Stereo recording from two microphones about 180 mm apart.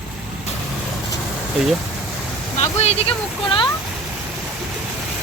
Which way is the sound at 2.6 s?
35° left (ahead or behind).